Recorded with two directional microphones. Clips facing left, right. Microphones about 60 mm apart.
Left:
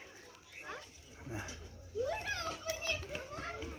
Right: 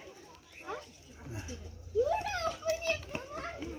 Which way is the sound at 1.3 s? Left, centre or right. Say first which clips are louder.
Left 1 dB; left.